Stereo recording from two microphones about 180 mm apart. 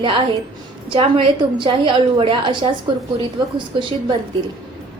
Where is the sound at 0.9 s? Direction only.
30° right (ahead or behind).